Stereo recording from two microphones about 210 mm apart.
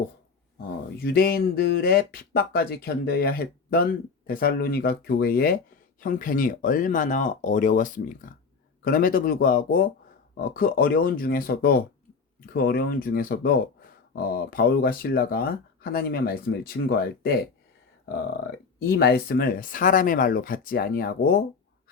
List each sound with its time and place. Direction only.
0.9 s speech: 45° left (ahead or behind)
18.8 s speech: 50° left (ahead or behind)